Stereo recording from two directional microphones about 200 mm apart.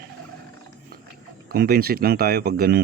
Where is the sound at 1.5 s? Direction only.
50° right (ahead or behind).